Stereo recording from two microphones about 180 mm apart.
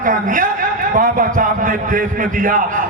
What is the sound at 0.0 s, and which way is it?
A man's voice, 50° right (ahead or behind).